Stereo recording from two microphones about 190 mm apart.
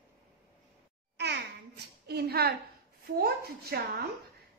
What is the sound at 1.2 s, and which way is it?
Babbling, 60° right (ahead or behind).